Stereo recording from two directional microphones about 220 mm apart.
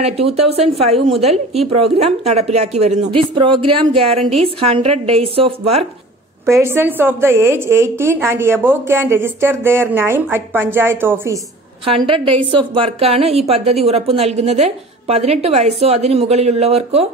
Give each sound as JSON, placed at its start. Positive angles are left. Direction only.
{"t": 0.0, "sound": "a woman's voice", "side_deg": -25}
{"t": 6.4, "sound": "a woman's voice", "side_deg": -10}
{"t": 11.8, "sound": "a woman's voice", "side_deg": -25}